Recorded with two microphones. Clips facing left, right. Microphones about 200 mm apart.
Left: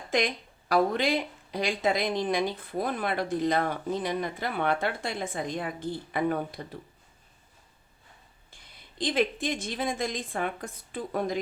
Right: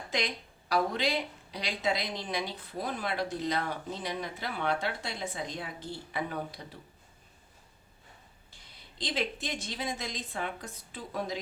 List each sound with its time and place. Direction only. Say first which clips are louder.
0.1 s speech: left 7 dB; 50° left (ahead or behind)
9.0 s speech: left 7 dB; 50° left (ahead or behind)